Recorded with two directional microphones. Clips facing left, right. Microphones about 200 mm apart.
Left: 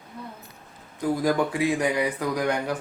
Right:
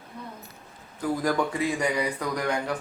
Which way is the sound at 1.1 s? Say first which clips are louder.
Left 2 dB; 10° left (ahead or behind).